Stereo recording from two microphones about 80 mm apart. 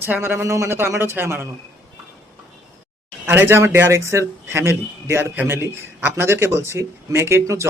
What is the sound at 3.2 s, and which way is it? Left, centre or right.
A man's voice, right.